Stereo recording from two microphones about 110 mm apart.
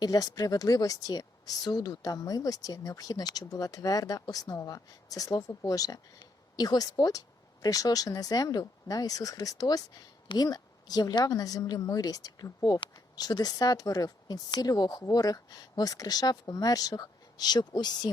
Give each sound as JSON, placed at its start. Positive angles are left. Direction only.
{"t": 0.0, "sound": "a woman's voice", "side_deg": 35}